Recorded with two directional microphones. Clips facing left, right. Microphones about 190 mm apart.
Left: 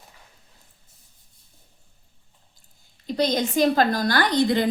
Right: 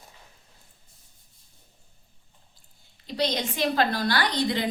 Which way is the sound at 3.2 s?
45° left (ahead or behind).